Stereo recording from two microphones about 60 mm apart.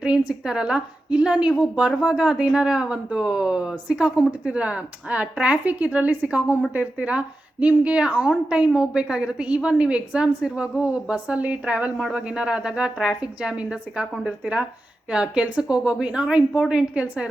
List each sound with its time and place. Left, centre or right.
0.0 s a woman's voice: centre